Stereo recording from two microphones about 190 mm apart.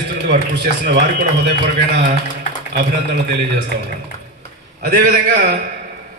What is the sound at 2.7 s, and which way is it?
Speech, 60° right (ahead or behind).